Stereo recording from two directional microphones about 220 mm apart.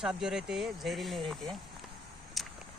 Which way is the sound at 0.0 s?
Centre (ahead or behind).